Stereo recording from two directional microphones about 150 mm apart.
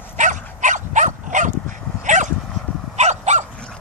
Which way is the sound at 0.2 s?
55° right (ahead or behind).